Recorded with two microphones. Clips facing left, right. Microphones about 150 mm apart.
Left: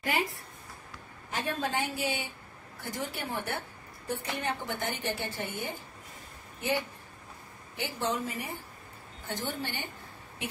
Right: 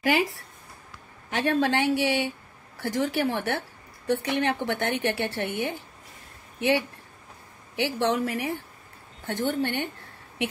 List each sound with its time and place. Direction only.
0.0 s a woman's voice: 85° right; by 8.6 s 70° right (ahead or behind)
9.3 s a woman's voice: 60° right (ahead or behind)